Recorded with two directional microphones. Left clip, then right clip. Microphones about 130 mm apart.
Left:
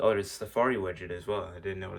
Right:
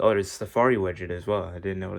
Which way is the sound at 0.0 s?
50° right (ahead or behind).